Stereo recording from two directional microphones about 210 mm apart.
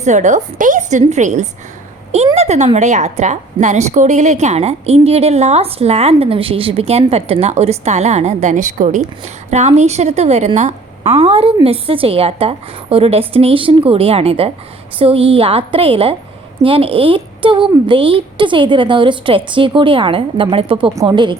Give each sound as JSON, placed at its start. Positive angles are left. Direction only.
{"t": 0.0, "sound": "a woman's voice", "side_deg": -35}